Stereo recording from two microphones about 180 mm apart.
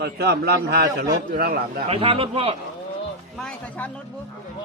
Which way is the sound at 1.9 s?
30° right (ahead or behind).